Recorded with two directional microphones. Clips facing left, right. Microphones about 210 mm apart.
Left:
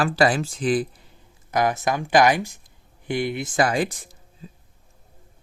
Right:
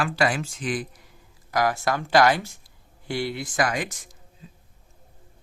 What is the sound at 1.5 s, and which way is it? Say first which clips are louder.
Speech: left 2 dB; 20° left (ahead or behind).